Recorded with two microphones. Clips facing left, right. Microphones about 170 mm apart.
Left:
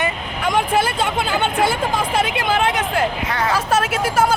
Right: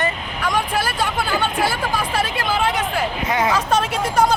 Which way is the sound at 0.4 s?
25° left (ahead or behind).